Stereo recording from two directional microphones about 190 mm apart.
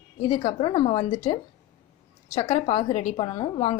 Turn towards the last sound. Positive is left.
turn(degrees=25)  # may be behind; listen again after turning